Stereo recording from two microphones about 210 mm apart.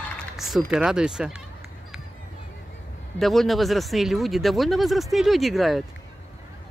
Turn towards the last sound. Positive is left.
turn(degrees=0)  # may be behind; listen again after turning